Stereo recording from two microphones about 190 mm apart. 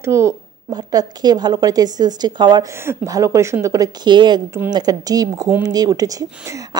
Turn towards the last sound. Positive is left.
turn(degrees=-20)  # may be behind; listen again after turning